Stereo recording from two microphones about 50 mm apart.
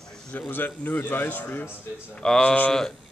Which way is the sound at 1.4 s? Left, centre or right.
Left.